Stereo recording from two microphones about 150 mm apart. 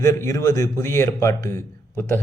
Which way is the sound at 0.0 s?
20° left (ahead or behind).